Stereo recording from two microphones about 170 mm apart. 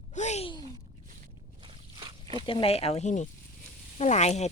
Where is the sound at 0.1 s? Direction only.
45° left (ahead or behind).